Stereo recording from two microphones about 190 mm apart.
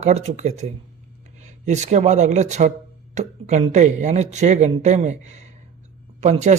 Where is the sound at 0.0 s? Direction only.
35° right (ahead or behind).